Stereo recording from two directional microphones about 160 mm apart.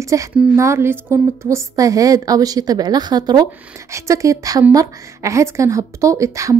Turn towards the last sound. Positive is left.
turn(degrees=-20)  # may be behind; listen again after turning